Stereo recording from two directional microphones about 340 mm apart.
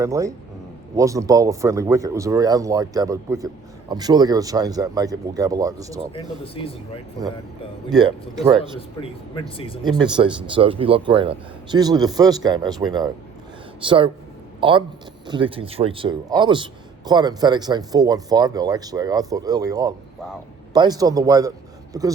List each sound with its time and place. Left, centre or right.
0.0 s speech: centre
6.1 s speech: centre
7.9 s speech: centre
9.0 s speech: centre
10.0 s a man's voice: centre